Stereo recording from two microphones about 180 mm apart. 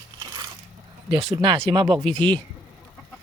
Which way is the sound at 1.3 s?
25° right (ahead or behind).